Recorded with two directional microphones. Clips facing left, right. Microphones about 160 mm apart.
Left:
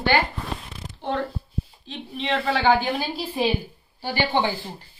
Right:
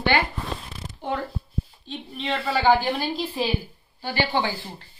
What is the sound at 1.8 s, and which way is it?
A woman's voice, centre (ahead or behind).